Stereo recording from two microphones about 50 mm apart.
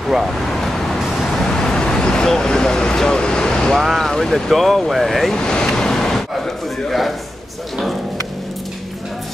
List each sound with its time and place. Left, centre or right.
0.3 s vehicle: centre
3.8 s speech: centre
5.4 s waves: centre
6.3 s speech: centre